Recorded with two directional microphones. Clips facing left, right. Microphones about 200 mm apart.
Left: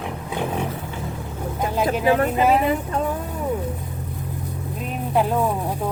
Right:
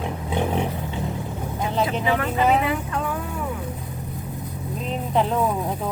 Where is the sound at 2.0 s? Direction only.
40° left (ahead or behind).